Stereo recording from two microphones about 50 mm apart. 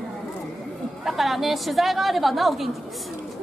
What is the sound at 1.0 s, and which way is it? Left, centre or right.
A woman's voice, centre.